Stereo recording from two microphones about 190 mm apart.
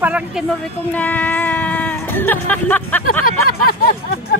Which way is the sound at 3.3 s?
50° left (ahead or behind).